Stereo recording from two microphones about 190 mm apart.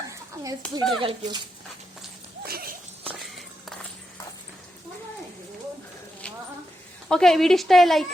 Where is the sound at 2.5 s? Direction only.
55° right (ahead or behind).